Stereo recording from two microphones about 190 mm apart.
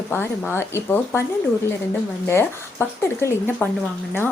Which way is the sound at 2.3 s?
15° left (ahead or behind).